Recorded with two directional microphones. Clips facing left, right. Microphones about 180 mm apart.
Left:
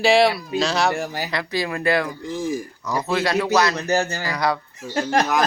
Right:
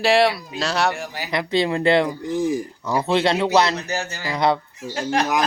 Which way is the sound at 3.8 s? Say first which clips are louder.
Left 6 dB; 45° left (ahead or behind).